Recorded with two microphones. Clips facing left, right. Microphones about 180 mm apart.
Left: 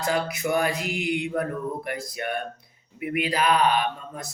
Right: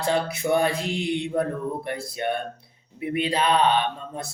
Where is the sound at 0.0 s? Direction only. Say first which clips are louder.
Right 2 dB; 30° right (ahead or behind).